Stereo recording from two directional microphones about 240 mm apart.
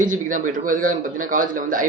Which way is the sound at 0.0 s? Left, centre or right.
Right.